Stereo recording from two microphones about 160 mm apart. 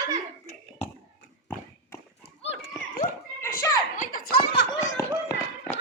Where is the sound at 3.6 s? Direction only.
20° left (ahead or behind).